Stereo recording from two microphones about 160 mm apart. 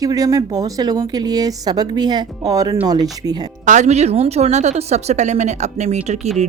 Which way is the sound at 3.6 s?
50° right (ahead or behind).